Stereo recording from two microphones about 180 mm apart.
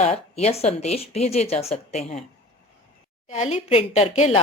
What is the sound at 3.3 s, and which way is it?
A woman's voice, 35° left (ahead or behind).